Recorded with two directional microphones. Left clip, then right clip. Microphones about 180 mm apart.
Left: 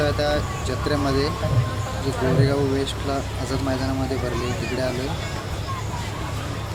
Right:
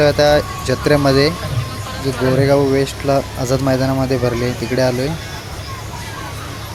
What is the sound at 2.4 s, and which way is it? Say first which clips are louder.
Speech: right 9 dB; 40° right (ahead or behind).